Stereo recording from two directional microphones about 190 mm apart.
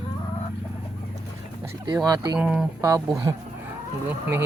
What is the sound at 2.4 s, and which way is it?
Speech, 5° right (ahead or behind).